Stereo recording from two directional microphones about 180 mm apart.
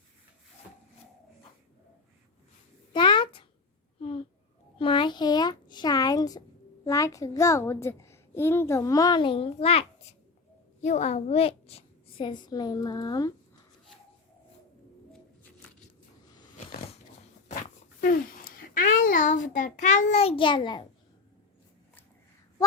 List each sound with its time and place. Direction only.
2.9 s a sound: 25° left (ahead or behind)
4.8 s a child's voice: 30° left (ahead or behind)
18.0 s a child's voice: 50° left (ahead or behind); by 20.8 s 25° left (ahead or behind)